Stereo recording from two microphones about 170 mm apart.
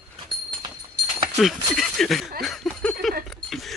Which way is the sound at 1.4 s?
Centre (ahead or behind).